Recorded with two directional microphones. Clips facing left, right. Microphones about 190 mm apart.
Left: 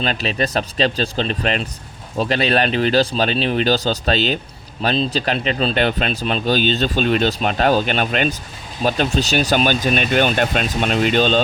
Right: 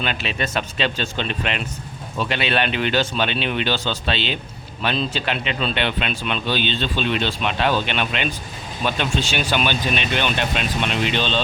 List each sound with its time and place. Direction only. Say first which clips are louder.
0.0 s speech: left 4 dB; 35° left (ahead or behind)